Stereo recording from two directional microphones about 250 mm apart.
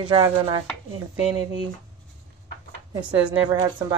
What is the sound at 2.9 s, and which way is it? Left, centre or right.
Speech, centre.